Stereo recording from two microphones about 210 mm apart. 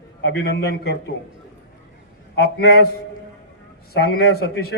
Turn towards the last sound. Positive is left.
turn(degrees=50)  # may be behind; listen again after turning